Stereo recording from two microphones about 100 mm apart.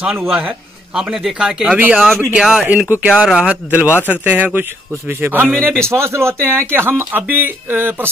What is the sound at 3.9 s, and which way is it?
Speech, 20° left (ahead or behind).